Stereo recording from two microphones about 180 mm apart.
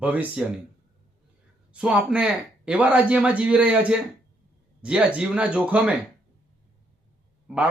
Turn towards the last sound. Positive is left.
turn(degrees=-5)  # may be behind; listen again after turning